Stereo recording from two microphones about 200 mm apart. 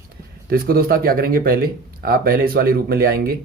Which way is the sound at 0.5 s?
50° right (ahead or behind).